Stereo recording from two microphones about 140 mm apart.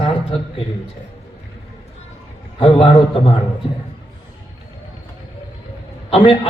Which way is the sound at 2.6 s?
40° left (ahead or behind).